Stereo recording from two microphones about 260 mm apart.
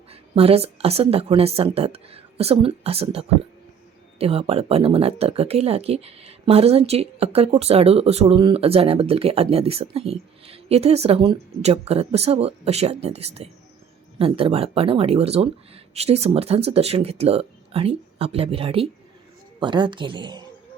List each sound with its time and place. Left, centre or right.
0.1 s speech: right